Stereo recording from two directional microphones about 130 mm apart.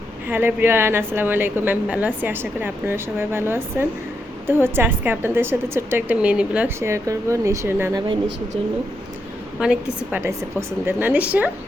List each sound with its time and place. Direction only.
0.3 s a woman's voice: 15° right (ahead or behind)
6.7 s speech: 20° right (ahead or behind)
7.9 s speech: 35° right (ahead or behind)
9.6 s a woman's voice: 5° right (ahead or behind)
10.2 s a woman's voice: 20° right (ahead or behind)